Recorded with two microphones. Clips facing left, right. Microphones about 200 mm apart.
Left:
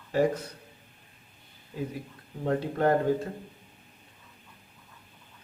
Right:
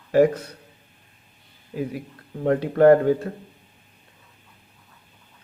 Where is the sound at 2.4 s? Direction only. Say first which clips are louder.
Right 9 dB; 65° right (ahead or behind).